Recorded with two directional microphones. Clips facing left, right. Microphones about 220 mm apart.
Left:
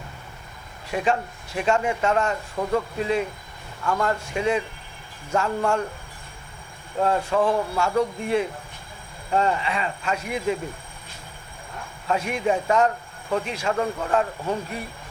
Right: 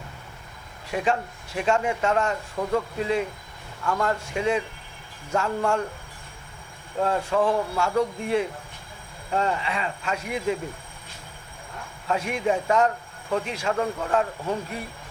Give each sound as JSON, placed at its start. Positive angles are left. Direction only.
{"t": 0.9, "sound": "a man's voice", "side_deg": 15}
{"t": 7.0, "sound": "a man's voice", "side_deg": 20}
{"t": 12.0, "sound": "a man's voice", "side_deg": 20}